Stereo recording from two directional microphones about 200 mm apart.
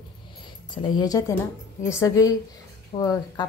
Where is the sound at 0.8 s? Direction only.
20° left (ahead or behind).